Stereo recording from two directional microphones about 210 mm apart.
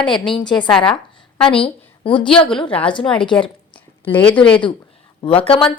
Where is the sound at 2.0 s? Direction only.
25° left (ahead or behind).